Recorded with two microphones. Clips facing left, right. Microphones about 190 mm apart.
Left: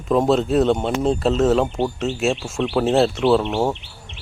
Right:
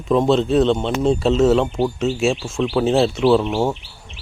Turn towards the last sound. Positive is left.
turn(degrees=0)  # may be behind; listen again after turning